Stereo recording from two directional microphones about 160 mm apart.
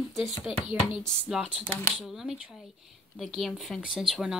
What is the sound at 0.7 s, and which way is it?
Speech, centre (ahead or behind).